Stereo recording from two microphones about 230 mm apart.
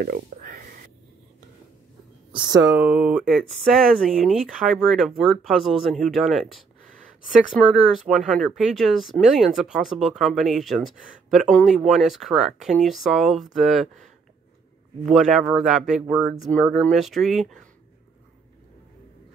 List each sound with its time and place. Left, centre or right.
0.0 s a sound: right
2.3 s speech: centre
2.7 s speech: centre
15.0 s speech: centre